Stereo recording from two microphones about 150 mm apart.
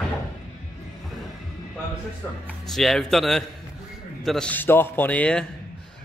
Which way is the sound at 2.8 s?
Centre (ahead or behind).